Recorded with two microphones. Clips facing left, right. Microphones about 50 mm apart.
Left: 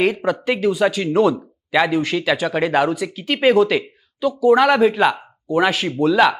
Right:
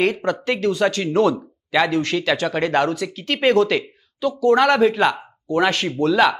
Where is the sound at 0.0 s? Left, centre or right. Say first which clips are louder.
Left 1 dB; centre.